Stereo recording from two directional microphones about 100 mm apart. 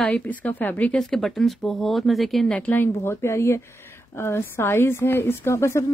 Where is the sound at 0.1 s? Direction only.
15° left (ahead or behind).